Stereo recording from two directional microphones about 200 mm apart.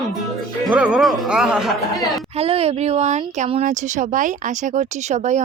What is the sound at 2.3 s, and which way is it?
Speech, 30° right (ahead or behind).